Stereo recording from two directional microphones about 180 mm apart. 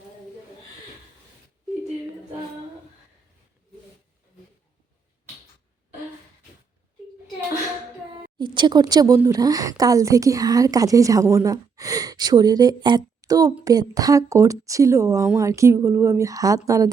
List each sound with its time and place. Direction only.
8.4 s speech: 25° right (ahead or behind)
13.2 s a sound: 20° right (ahead or behind)
13.7 s speech: 20° right (ahead or behind)